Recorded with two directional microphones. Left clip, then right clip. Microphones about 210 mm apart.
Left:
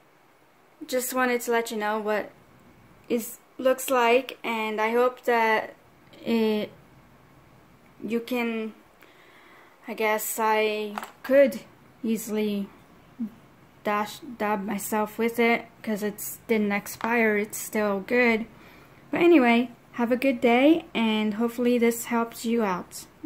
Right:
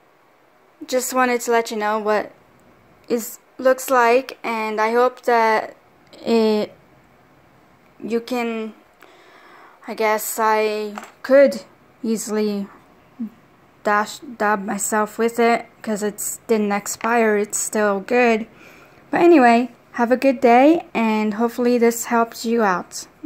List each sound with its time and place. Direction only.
0.8 s a woman's voice: 25° right (ahead or behind)
8.1 s speech: 25° right (ahead or behind)
9.8 s speech: 30° right (ahead or behind)
13.8 s a woman's voice: 20° right (ahead or behind)